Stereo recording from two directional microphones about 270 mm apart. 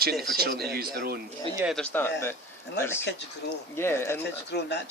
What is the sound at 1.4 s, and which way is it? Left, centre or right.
Speech, centre.